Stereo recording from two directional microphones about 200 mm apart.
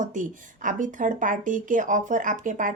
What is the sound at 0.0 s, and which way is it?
A woman's voice, 40° right (ahead or behind).